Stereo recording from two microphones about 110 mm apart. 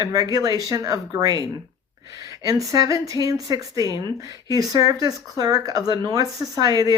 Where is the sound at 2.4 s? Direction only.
30° right (ahead or behind).